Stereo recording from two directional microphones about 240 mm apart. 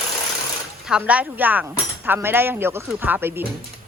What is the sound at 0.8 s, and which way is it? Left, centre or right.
Speech, centre.